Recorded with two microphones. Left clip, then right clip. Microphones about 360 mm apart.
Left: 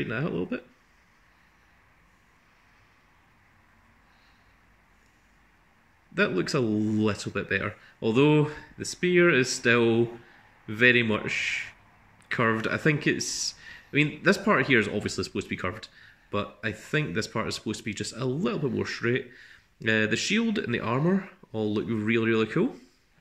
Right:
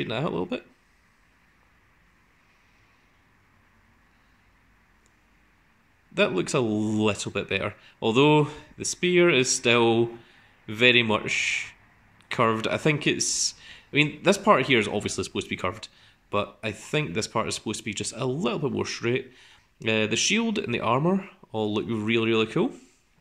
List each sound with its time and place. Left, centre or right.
0.0 s speech: centre
6.1 s speech: centre